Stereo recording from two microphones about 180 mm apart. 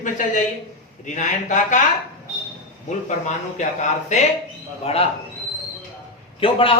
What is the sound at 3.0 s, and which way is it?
Speech, 40° left (ahead or behind).